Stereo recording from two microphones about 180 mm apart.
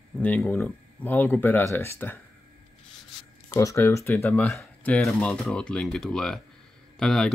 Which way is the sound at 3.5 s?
15° left (ahead or behind).